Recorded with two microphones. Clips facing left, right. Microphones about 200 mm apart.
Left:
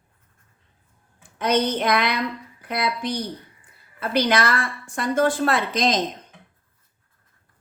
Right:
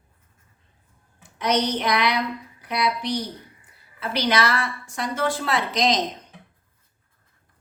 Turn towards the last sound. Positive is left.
turn(degrees=50)  # may be behind; listen again after turning